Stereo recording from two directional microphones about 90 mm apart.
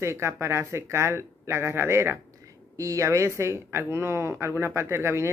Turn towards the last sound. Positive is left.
turn(degrees=-30)  # may be behind; listen again after turning